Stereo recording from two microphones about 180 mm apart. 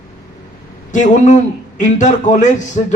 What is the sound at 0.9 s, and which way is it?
A man's voice, 45° left (ahead or behind).